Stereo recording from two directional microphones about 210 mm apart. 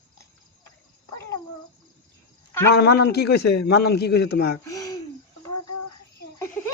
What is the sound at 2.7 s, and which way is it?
A man's voice, 50° left (ahead or behind).